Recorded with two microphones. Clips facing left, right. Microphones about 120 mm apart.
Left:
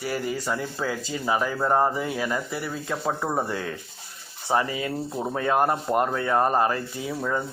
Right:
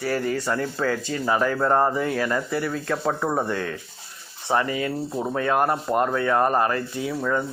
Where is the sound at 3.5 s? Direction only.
25° left (ahead or behind).